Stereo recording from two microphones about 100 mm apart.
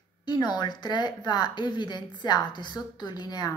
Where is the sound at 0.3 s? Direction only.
45° left (ahead or behind).